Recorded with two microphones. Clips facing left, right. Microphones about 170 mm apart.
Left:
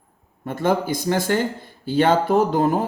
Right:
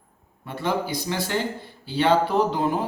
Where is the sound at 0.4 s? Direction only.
45° left (ahead or behind).